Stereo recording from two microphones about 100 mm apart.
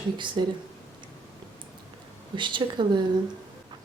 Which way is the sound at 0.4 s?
55° right (ahead or behind).